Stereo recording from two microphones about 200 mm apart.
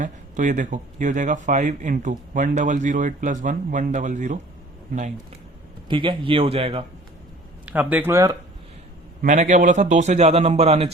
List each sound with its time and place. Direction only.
0.0 s speech: 40° right (ahead or behind)
5.9 s a man's voice: 25° right (ahead or behind)
7.6 s speech: 10° right (ahead or behind)
9.2 s speech: 40° right (ahead or behind)